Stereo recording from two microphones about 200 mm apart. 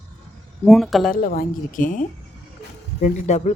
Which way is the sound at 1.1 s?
45° left (ahead or behind).